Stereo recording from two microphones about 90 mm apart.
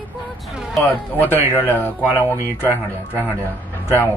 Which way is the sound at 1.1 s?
20° left (ahead or behind).